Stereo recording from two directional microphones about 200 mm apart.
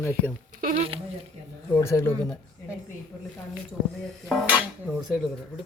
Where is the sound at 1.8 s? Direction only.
15° left (ahead or behind).